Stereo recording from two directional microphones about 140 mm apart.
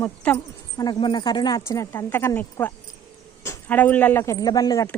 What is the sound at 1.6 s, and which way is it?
Speech, 20° left (ahead or behind).